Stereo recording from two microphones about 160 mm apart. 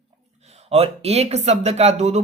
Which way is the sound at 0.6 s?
40° right (ahead or behind).